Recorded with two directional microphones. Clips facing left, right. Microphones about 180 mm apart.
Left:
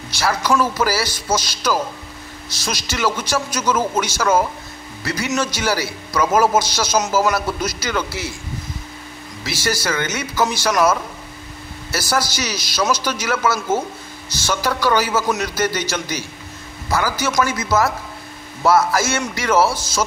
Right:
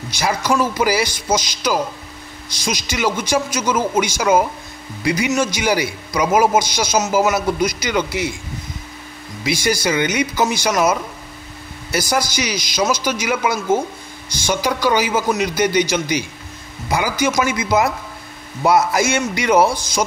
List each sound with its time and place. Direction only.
0.2 s a man's voice: 15° right (ahead or behind)
9.4 s a man's voice: 15° right (ahead or behind)
12.1 s a man's voice: 10° right (ahead or behind)